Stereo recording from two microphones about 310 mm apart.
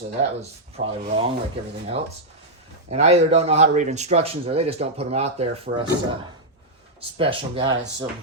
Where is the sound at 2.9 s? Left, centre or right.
Right.